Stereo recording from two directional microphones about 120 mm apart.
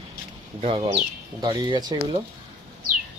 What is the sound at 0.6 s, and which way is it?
Speech, 55° right (ahead or behind).